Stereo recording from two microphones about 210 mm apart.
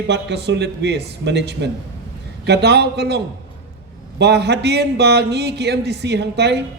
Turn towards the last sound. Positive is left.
turn(degrees=-55)  # may be behind; listen again after turning